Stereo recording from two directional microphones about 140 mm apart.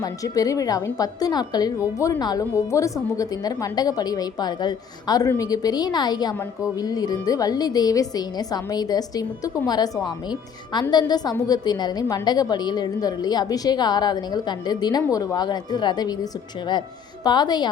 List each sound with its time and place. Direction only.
0.0 s a woman's voice: 25° left (ahead or behind)
17.2 s a woman's voice: 30° left (ahead or behind)